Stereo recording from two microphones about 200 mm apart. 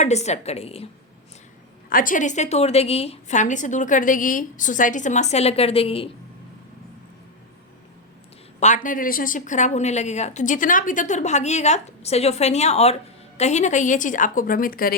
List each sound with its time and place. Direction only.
0.0 s speech: 35° left (ahead or behind)
1.9 s speech: 45° left (ahead or behind); by 6.1 s 30° left (ahead or behind)
8.6 s speech: 40° left (ahead or behind)